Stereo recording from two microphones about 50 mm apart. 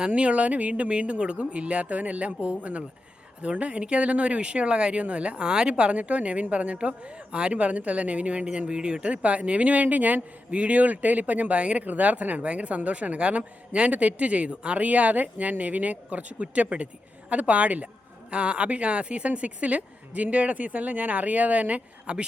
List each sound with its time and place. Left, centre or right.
0.0 s speech: right